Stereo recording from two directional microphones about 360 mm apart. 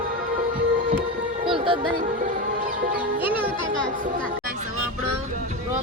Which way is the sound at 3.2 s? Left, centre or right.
Centre.